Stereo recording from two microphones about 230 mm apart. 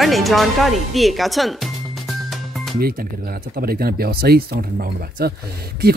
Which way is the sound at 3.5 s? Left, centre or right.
Right.